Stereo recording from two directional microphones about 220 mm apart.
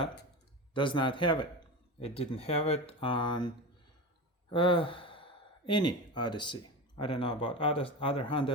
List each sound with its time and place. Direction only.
0.7 s speech: 20° left (ahead or behind)